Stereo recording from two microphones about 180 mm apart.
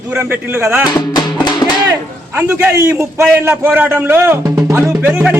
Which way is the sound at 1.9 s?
10° right (ahead or behind).